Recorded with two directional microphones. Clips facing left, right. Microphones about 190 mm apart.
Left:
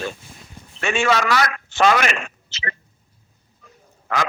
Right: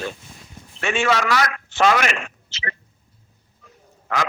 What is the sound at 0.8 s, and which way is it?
A man's voice, 40° left (ahead or behind).